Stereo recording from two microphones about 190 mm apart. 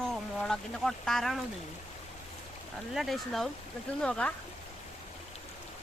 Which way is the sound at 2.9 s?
Centre (ahead or behind).